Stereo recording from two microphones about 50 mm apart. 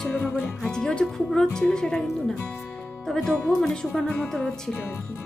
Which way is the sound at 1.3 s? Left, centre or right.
Centre.